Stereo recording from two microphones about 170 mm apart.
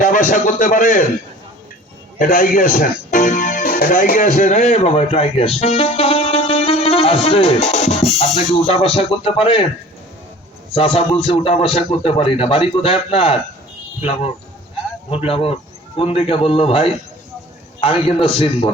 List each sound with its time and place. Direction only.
0.0 s a man's voice: 50° left (ahead or behind)
2.1 s a man's voice: 50° left (ahead or behind); by 9.6 s 30° left (ahead or behind)
10.8 s a man's voice: 35° left (ahead or behind)